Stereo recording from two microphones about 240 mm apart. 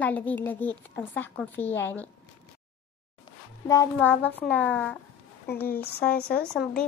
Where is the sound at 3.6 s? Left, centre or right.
Centre.